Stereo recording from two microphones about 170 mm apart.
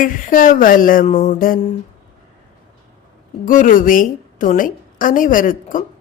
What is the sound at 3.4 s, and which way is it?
A woman's voice, 50° left (ahead or behind).